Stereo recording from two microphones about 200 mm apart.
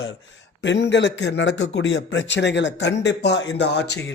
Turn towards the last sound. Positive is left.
turn(degrees=60)  # may be behind; listen again after turning